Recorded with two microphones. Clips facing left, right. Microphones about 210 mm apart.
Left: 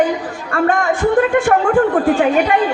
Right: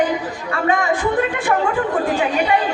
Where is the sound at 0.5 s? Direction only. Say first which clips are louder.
Left 3 dB; 50° left (ahead or behind).